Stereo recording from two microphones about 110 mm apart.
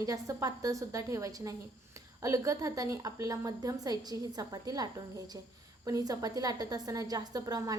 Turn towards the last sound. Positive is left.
turn(degrees=-30)  # may be behind; listen again after turning